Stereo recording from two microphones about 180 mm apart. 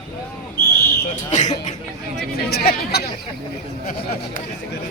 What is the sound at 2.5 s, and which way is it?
Speech, 60° left (ahead or behind).